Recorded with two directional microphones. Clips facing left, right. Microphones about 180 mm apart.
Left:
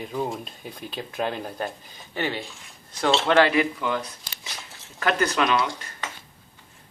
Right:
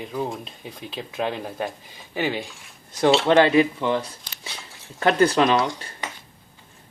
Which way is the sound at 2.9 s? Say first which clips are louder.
Right 3 dB; 15° right (ahead or behind).